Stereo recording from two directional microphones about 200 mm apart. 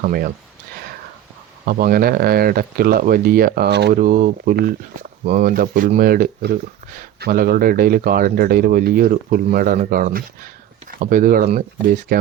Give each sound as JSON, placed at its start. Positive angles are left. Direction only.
{"t": 0.0, "sound": "speech", "side_deg": -45}
{"t": 1.6, "sound": "speech", "side_deg": -45}